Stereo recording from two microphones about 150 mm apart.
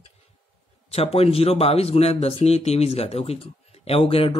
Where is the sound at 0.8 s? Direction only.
40° left (ahead or behind).